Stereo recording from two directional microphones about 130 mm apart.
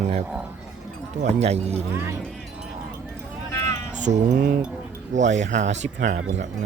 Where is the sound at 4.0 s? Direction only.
70° right (ahead or behind).